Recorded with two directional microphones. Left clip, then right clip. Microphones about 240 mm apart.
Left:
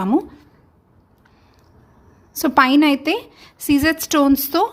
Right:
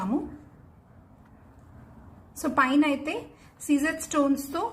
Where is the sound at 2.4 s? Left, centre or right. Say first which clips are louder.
Left 9 dB; left.